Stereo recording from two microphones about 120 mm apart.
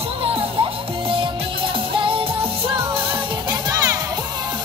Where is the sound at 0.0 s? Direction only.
50° right (ahead or behind).